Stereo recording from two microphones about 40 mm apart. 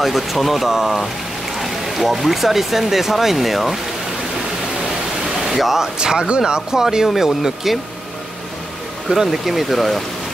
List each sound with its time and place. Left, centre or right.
0.0 s speech: centre
5.5 s speech: centre
5.9 s speech: right; by 7.8 s centre
9.1 s speech: centre